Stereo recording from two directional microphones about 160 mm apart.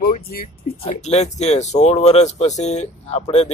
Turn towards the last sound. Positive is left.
turn(degrees=40)  # may be behind; listen again after turning